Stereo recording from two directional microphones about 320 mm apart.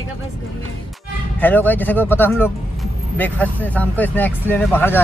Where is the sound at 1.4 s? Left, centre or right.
Centre.